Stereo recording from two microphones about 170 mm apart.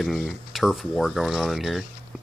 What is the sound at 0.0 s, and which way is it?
Speech, centre (ahead or behind).